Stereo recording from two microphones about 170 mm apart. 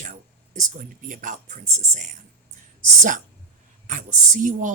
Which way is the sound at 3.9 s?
50° right (ahead or behind).